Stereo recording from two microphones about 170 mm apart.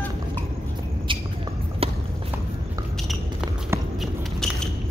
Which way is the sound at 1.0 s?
30° right (ahead or behind).